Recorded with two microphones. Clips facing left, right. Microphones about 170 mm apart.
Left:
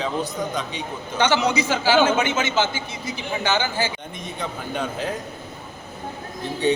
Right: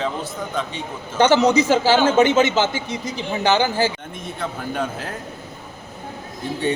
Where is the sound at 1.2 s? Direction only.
45° right (ahead or behind).